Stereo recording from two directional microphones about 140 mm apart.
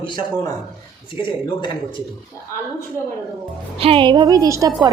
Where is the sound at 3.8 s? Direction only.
40° right (ahead or behind); by 4.9 s 25° right (ahead or behind).